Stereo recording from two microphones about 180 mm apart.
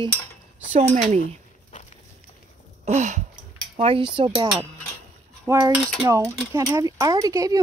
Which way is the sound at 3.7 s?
30° right (ahead or behind).